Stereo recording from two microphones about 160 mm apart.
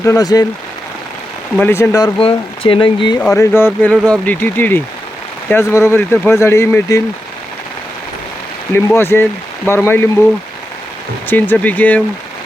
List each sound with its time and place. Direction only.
0.0 s speech: 20° left (ahead or behind)
1.5 s speech: 15° left (ahead or behind)
2.1 s speech: 35° left (ahead or behind)
3.3 s speech: 15° left (ahead or behind)
3.9 s speech: 5° left (ahead or behind)
9.0 s speech: 15° left (ahead or behind)
11.3 s speech: 10° left (ahead or behind)